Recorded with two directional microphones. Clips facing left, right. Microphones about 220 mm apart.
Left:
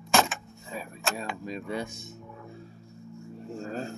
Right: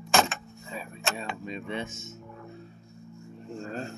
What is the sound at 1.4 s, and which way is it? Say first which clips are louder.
Speech: left 1 dB; 40° left (ahead or behind).